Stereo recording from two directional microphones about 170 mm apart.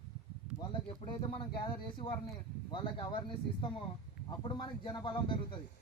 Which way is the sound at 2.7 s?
30° left (ahead or behind).